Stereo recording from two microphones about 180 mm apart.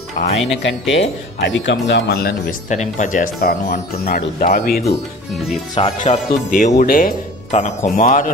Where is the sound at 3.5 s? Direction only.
60° left (ahead or behind).